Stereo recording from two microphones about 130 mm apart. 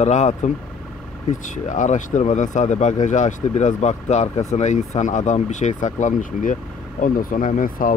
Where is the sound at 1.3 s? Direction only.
75° left (ahead or behind).